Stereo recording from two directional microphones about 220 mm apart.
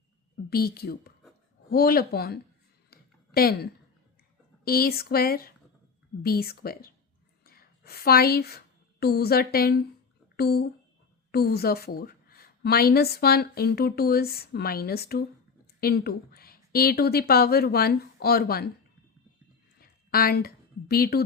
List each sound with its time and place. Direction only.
0.5 s a woman's voice: 45° left (ahead or behind)
2.9 s a sound: 45° left (ahead or behind)
4.6 s a woman's voice: 45° left (ahead or behind)
19.8 s a woman's voice: 45° left (ahead or behind)